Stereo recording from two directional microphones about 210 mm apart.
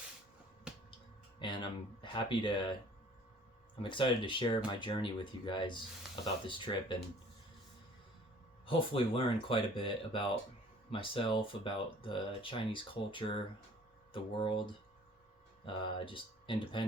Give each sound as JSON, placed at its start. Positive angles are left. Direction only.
{"t": 1.4, "sound": "speech", "side_deg": 20}
{"t": 3.8, "sound": "speech", "side_deg": 25}
{"t": 8.6, "sound": "speech", "side_deg": 25}
{"t": 15.6, "sound": "speech", "side_deg": 25}